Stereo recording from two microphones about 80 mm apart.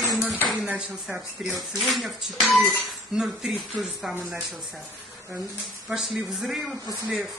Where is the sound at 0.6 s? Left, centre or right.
Centre.